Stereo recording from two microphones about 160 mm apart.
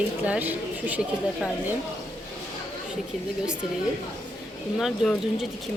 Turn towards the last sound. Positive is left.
turn(degrees=0)  # may be behind; listen again after turning